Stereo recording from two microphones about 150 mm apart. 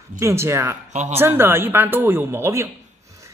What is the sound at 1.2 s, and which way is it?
Speech, 15° right (ahead or behind).